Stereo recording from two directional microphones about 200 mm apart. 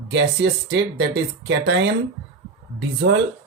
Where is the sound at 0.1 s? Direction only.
60° right (ahead or behind).